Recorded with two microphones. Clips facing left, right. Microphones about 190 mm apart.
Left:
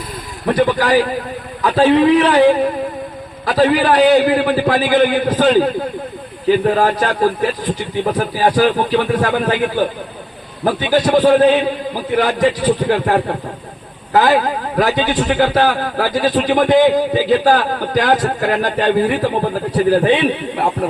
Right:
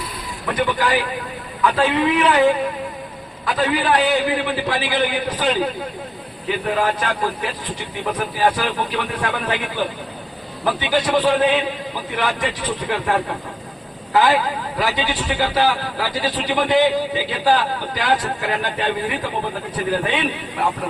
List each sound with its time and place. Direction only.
0.4 s a man's voice: 40° left (ahead or behind)
6.7 s a man's voice: 40° left (ahead or behind)
8.5 s a man's voice: 40° left (ahead or behind)